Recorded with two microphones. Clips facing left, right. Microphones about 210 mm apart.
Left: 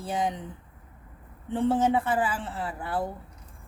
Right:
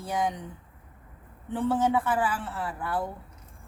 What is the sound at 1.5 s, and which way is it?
A woman's voice, 25° left (ahead or behind).